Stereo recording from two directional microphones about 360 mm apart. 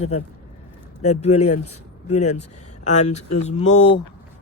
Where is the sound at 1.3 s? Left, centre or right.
Left.